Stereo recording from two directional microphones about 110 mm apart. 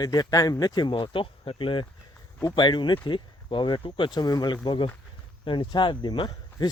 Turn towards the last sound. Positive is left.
turn(degrees=30)  # may be behind; listen again after turning